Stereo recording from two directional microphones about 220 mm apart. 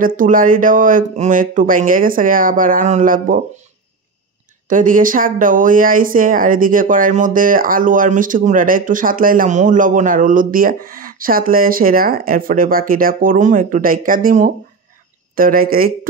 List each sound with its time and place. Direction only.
0.0 s speech: 40° right (ahead or behind)
4.6 s speech: 35° right (ahead or behind)